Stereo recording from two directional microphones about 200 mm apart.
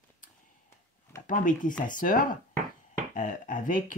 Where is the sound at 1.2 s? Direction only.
40° left (ahead or behind).